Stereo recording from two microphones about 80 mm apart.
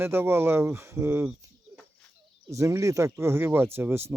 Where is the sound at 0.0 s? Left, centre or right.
Right.